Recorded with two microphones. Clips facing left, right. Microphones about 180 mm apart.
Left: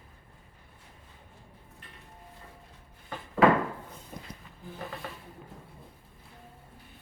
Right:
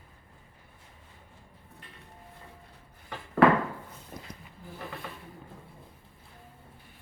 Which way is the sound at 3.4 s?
65° right (ahead or behind).